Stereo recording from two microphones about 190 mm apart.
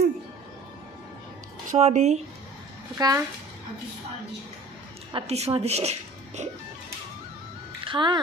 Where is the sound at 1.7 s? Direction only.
35° right (ahead or behind).